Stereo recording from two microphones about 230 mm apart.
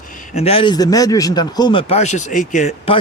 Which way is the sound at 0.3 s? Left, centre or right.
Left.